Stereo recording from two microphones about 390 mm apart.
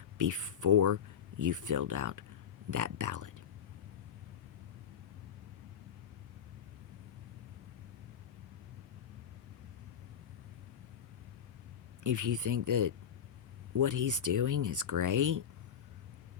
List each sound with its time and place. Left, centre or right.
0.2 s speech: right
12.0 s speech: right